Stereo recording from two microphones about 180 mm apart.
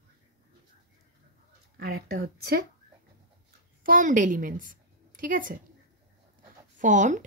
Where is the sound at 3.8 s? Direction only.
50° right (ahead or behind).